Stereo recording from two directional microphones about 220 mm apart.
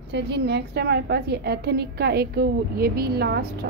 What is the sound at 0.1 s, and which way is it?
A woman's voice, 50° right (ahead or behind).